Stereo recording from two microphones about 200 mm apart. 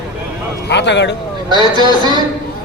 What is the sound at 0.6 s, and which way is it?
Speech, 60° left (ahead or behind).